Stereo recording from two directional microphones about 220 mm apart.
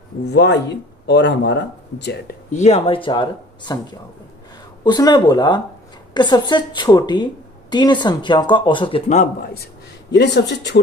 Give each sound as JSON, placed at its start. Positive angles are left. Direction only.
{"t": 0.3, "sound": "speech", "side_deg": 50}
{"t": 2.5, "sound": "speech", "side_deg": 30}
{"t": 10.1, "sound": "speech", "side_deg": 50}